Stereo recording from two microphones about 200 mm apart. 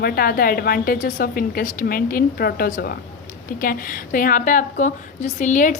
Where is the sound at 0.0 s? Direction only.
45° left (ahead or behind).